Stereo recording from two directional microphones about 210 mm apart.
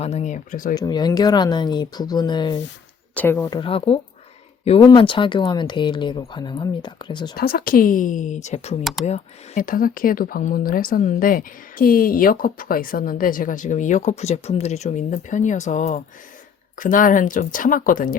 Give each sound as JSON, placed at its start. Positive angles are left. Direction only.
{"t": 0.0, "sound": "speech", "side_deg": 30}
{"t": 0.7, "sound": "speech", "side_deg": 20}
{"t": 3.2, "sound": "speech", "side_deg": 10}
{"t": 7.3, "sound": "speech", "side_deg": 45}
{"t": 8.8, "sound": "speech", "side_deg": 0}
{"t": 9.0, "sound": "speech", "side_deg": 35}